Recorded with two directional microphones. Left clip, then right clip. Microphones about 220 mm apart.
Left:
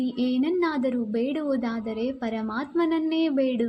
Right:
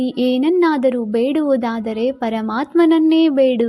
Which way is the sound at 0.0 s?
35° right (ahead or behind).